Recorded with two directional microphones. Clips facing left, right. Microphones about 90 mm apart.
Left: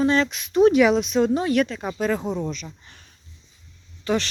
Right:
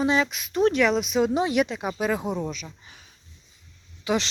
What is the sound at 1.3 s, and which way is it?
Speech, 15° right (ahead or behind).